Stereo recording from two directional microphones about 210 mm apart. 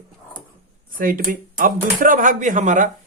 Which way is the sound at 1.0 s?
40° right (ahead or behind).